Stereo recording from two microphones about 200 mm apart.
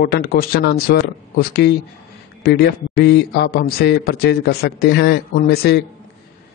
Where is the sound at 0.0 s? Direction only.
50° left (ahead or behind).